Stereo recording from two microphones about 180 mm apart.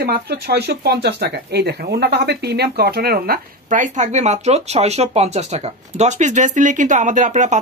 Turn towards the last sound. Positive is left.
turn(degrees=-40)  # may be behind; listen again after turning